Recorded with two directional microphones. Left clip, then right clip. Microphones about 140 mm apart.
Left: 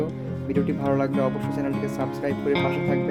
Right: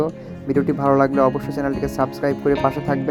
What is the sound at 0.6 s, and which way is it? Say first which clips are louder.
Speech: right 8 dB; 15° right (ahead or behind).